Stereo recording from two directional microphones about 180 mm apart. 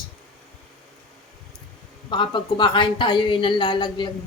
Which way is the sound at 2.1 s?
25° left (ahead or behind).